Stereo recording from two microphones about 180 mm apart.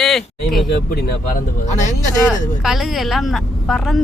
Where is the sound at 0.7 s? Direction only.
60° left (ahead or behind).